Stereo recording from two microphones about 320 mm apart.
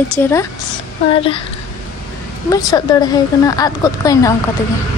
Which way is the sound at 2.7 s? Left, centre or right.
Centre.